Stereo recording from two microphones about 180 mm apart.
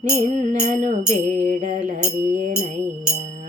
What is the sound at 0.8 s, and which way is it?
Music, 40° right (ahead or behind).